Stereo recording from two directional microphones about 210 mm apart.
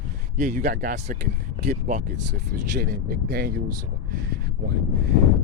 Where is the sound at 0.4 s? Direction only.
35° right (ahead or behind).